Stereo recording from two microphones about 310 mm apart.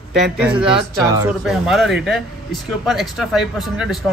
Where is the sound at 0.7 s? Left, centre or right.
Centre.